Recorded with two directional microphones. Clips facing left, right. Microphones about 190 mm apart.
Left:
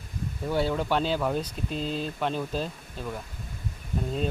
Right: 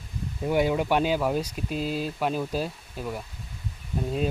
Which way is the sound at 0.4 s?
15° right (ahead or behind).